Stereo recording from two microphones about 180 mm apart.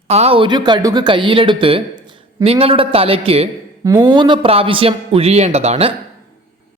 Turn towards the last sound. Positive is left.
turn(degrees=-35)  # may be behind; listen again after turning